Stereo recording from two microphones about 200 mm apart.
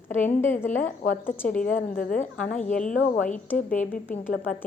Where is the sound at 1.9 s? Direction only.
45° left (ahead or behind).